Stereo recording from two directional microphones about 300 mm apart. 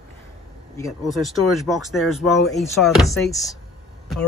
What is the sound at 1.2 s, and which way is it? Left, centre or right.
Speech, centre.